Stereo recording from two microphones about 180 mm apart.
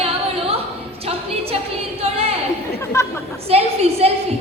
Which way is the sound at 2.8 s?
15° left (ahead or behind).